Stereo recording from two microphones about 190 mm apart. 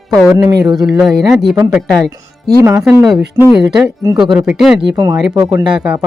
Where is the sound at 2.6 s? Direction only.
10° right (ahead or behind).